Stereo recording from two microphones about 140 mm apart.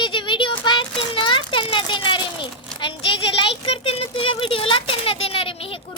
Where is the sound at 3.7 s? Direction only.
45° left (ahead or behind).